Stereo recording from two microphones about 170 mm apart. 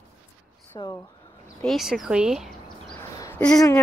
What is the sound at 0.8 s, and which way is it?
Speech, 25° left (ahead or behind).